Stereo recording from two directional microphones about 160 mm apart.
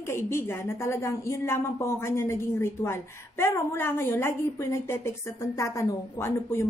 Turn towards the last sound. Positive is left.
turn(degrees=15)  # may be behind; listen again after turning